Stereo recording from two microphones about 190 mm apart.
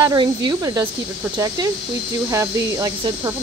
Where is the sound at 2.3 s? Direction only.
15° right (ahead or behind).